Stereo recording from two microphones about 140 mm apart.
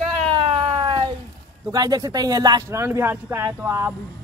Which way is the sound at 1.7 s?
25° right (ahead or behind).